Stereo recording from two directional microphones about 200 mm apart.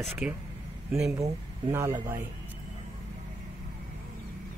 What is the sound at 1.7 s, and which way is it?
Speech, 15° right (ahead or behind).